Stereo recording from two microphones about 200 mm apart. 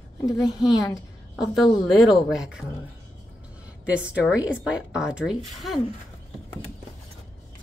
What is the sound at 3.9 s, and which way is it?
A woman's voice, 5° right (ahead or behind).